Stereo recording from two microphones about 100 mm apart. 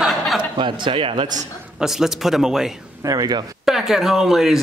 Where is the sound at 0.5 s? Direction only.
50° right (ahead or behind).